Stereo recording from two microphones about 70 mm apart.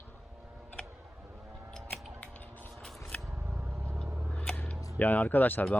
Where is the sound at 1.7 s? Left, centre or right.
Centre.